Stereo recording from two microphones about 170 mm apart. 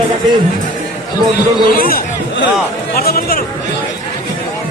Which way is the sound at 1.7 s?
60° left (ahead or behind).